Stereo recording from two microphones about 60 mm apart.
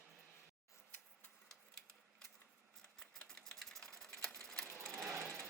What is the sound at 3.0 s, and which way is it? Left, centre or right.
Typewriter, centre.